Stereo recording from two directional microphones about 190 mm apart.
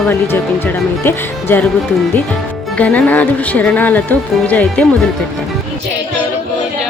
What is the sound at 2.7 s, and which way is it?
Speech, 5° left (ahead or behind).